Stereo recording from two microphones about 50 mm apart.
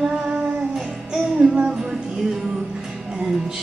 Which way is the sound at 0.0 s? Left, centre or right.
Centre.